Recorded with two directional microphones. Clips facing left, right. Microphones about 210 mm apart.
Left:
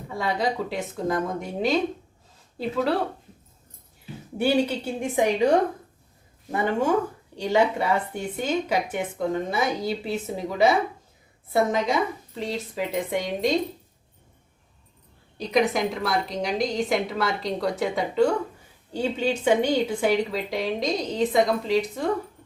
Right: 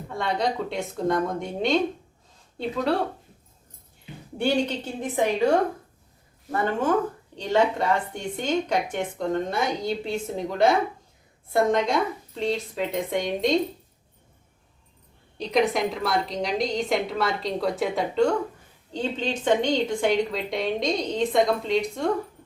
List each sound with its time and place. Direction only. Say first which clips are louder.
0.1 s speech: even; 5° left (ahead or behind)
4.4 s a woman's voice: left 2 dB; 5° left (ahead or behind)
7.3 s speech: left 1 dB; 10° left (ahead or behind)
15.4 s speech: even; centre (ahead or behind)